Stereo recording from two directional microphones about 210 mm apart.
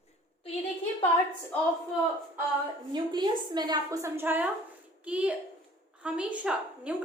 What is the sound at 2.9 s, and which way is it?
A woman's voice, 20° right (ahead or behind).